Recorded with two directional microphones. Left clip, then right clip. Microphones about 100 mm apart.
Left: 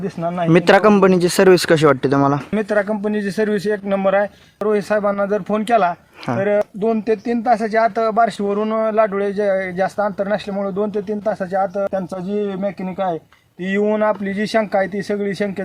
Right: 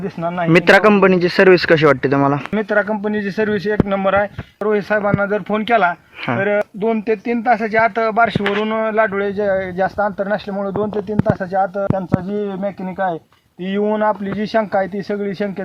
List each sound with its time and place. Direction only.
0.0 s speech: 30° left (ahead or behind)